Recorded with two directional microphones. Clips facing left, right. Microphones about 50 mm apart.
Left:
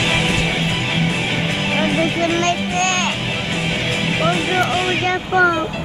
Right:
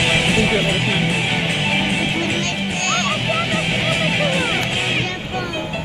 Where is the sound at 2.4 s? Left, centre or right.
Left.